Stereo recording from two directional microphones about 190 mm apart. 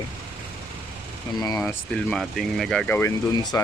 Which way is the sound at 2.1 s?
Centre (ahead or behind).